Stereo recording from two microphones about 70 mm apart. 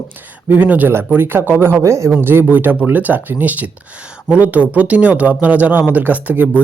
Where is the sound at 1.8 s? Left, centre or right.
Right.